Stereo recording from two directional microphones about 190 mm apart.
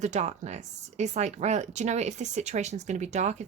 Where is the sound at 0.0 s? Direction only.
35° right (ahead or behind).